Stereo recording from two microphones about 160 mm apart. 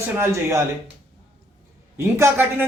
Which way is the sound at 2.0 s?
15° right (ahead or behind).